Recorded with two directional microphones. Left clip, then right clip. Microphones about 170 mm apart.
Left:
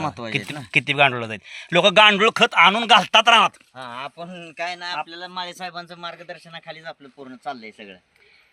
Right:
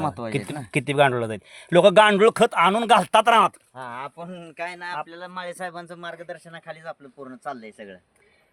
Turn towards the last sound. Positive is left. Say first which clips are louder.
# left 2 dB
turn(degrees=-15)  # may be behind; listen again after turning